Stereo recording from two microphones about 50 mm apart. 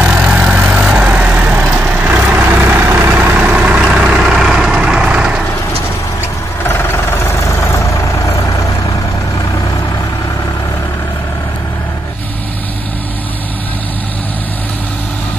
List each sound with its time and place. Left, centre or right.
0.0 s vehicle: right
0.7 s vehicle: centre
1.0 s vehicle: right
2.4 s vehicle: right
3.4 s vehicle: right
3.8 s vehicle: centre
6.6 s vehicle: left
8.3 s vehicle: left